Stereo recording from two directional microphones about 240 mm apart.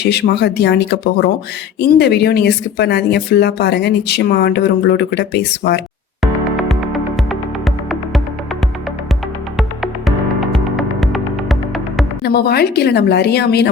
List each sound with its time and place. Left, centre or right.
0.0 s speech: left
6.6 s music: centre
9.6 s music: centre
12.2 s a woman's voice: left